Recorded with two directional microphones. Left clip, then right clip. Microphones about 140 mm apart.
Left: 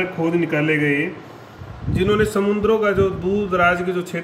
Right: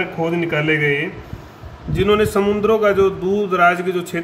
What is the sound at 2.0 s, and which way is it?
A man's voice, 45° right (ahead or behind).